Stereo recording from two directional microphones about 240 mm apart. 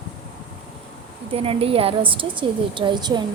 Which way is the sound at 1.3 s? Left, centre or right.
Right.